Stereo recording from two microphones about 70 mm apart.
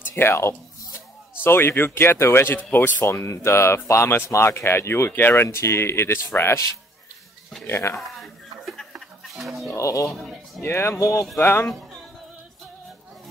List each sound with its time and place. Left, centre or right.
0.0 s speech: left
3.0 s speech: left
7.6 s speech: left
7.9 s a sound: centre
9.3 s music: centre
9.7 s speech: left
10.1 s speech: centre
10.6 s speech: left